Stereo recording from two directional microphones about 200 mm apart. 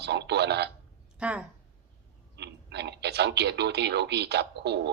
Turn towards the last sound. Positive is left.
turn(degrees=-55)  # may be behind; listen again after turning